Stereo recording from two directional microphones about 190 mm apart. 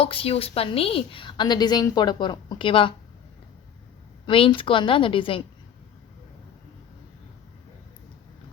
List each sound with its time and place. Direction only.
0.0 s a woman's voice: 30° left (ahead or behind)
4.3 s a woman's voice: 25° left (ahead or behind)